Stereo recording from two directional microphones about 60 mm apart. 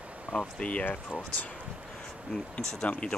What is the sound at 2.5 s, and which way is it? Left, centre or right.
Speech, centre.